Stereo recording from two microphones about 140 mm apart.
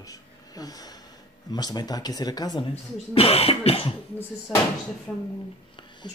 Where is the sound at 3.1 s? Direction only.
45° left (ahead or behind).